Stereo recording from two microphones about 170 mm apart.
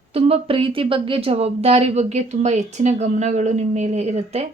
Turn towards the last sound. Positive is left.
turn(degrees=-40)  # may be behind; listen again after turning